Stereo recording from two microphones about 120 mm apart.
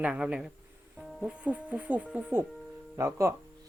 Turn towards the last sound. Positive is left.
turn(degrees=-25)  # may be behind; listen again after turning